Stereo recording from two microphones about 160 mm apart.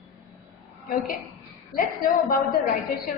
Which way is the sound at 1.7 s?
65° left (ahead or behind).